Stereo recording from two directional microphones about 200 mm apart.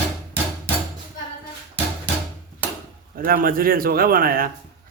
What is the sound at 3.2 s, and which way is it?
A man's voice, 45° right (ahead or behind).